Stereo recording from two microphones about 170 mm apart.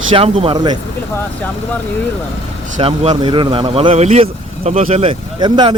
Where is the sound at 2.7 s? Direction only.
40° right (ahead or behind).